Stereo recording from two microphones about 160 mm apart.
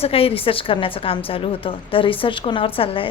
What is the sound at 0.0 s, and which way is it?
A woman's voice, 35° left (ahead or behind).